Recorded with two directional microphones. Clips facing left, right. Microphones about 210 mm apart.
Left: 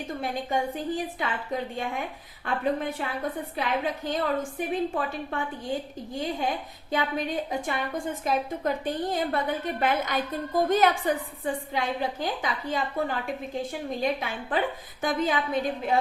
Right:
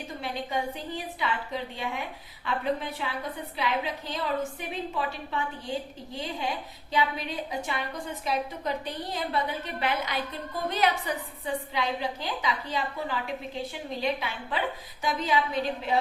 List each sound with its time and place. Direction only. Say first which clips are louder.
0.2 s a woman's voice: left 2 dB; 50° left (ahead or behind)